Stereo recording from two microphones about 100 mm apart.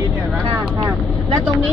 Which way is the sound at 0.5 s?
35° right (ahead or behind).